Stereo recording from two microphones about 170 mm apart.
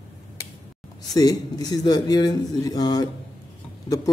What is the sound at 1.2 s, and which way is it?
A man's voice, 20° left (ahead or behind).